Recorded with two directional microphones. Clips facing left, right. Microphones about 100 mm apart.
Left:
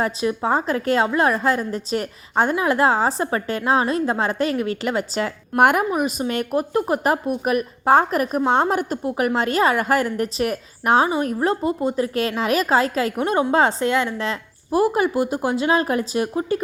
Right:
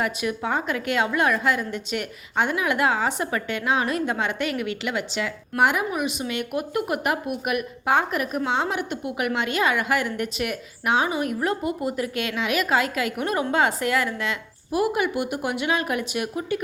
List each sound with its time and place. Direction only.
0.0 s a woman's voice: 30° left (ahead or behind)